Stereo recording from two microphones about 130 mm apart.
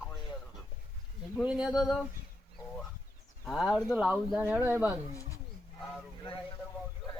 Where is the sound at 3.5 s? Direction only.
Centre (ahead or behind).